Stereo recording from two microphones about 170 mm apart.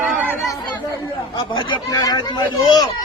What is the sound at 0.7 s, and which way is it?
Chatter, 20° left (ahead or behind).